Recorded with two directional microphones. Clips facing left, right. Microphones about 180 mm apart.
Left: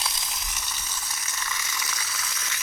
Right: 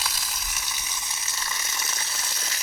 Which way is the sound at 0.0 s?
5° right (ahead or behind).